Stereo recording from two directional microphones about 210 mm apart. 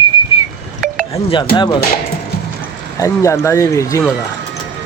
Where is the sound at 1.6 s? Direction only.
20° left (ahead or behind).